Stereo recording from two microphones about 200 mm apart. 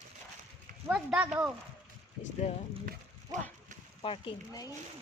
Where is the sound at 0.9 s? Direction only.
5° right (ahead or behind).